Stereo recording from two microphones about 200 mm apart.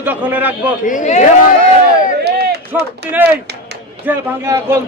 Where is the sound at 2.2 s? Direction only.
55° right (ahead or behind).